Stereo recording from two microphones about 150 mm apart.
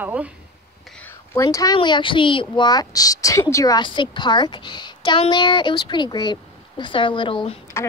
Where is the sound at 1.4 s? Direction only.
25° left (ahead or behind).